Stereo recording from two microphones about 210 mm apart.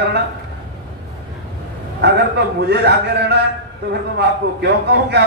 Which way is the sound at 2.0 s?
55° right (ahead or behind).